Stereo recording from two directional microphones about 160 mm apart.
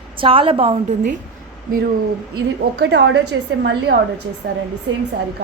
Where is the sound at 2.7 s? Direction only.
90° right.